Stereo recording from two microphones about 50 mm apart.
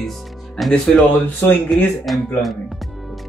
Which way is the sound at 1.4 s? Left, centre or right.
Left.